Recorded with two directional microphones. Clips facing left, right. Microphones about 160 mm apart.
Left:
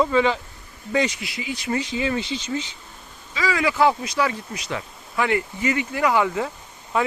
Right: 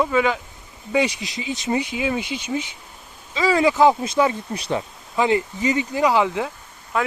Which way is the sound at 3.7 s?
15° right (ahead or behind).